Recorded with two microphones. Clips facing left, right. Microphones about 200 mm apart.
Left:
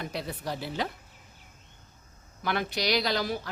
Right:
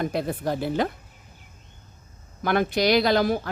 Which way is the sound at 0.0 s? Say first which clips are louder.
Right 9 dB; 50° right (ahead or behind).